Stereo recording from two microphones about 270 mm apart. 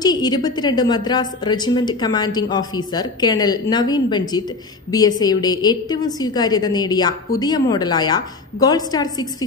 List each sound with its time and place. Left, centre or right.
0.0 s a woman's voice: centre